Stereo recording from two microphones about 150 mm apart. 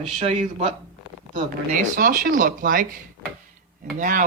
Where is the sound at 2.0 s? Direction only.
65° right (ahead or behind).